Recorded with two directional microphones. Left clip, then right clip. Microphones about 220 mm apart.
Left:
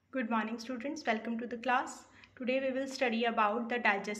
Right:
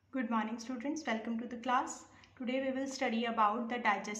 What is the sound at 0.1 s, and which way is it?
A woman's voice, 10° left (ahead or behind).